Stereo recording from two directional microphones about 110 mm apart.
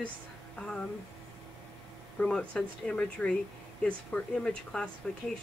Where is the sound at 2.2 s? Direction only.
10° left (ahead or behind).